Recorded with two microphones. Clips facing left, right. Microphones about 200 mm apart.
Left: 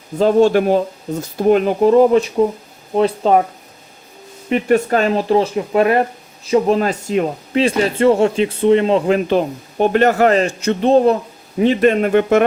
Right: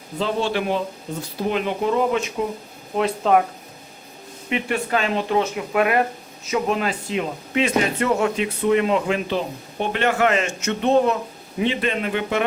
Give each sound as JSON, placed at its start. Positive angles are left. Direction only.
{"t": 0.2, "sound": "speech", "side_deg": 45}
{"t": 4.4, "sound": "speech", "side_deg": 40}
{"t": 7.6, "sound": "speech", "side_deg": 30}